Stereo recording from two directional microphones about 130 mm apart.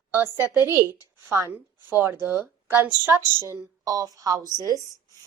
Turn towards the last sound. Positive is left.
turn(degrees=-30)  # may be behind; listen again after turning